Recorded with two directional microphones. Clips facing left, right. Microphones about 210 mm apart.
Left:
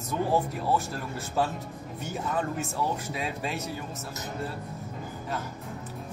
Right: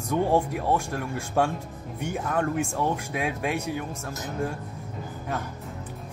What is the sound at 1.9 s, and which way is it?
Speech, 60° right (ahead or behind).